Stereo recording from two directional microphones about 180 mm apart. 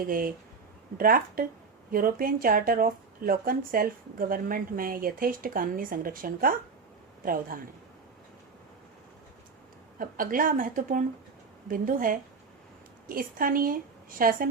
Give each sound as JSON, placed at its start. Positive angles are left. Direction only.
{"t": 0.0, "sound": "speech", "side_deg": -50}
{"t": 10.0, "sound": "speech", "side_deg": -50}